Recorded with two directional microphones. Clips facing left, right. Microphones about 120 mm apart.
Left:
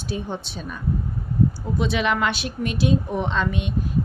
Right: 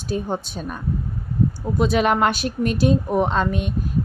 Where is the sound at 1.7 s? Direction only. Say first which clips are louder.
Right 5 dB; 45° right (ahead or behind).